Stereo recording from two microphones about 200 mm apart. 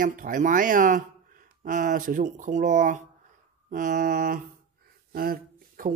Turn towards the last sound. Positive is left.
turn(degrees=-45)  # may be behind; listen again after turning